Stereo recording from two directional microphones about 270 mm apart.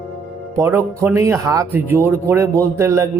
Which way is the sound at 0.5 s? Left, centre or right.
Centre.